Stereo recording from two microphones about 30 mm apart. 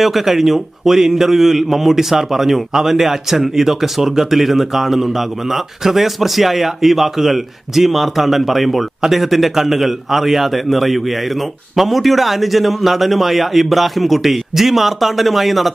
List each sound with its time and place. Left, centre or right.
0.0 s a man's voice: centre